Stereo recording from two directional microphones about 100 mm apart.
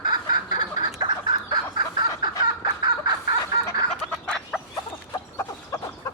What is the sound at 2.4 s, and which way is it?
Fowl, 45° right (ahead or behind).